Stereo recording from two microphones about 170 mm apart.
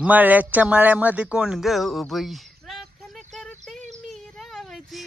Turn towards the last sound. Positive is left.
turn(degrees=0)  # may be behind; listen again after turning